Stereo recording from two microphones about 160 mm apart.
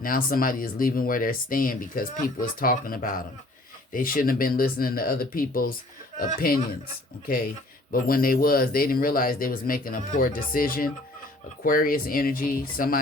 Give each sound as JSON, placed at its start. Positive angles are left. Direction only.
{"t": 0.0, "sound": "speech", "side_deg": 65}
{"t": 7.9, "sound": "speech", "side_deg": 65}